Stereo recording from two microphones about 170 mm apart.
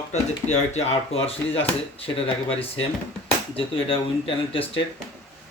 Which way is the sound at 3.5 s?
30° left (ahead or behind).